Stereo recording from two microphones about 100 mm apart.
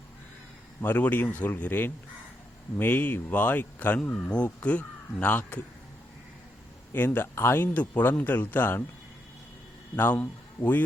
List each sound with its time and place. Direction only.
0.8 s speech: 20° left (ahead or behind)
6.9 s speech: 20° left (ahead or behind)
9.9 s a man's voice: 20° left (ahead or behind)